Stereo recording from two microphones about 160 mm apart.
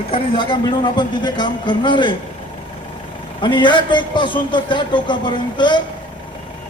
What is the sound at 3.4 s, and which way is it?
A man's voice, 30° left (ahead or behind).